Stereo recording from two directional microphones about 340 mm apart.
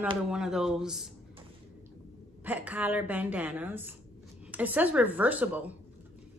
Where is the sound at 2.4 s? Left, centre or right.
Centre.